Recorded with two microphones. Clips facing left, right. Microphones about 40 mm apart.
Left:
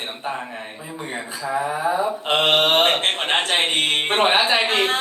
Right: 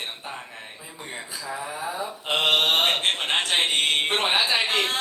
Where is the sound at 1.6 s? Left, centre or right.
Left.